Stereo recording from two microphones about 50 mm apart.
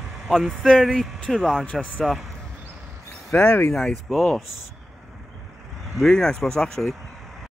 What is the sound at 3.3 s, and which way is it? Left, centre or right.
Speech, centre.